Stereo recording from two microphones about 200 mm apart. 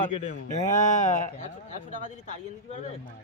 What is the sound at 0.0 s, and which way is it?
A man's voice, 40° left (ahead or behind).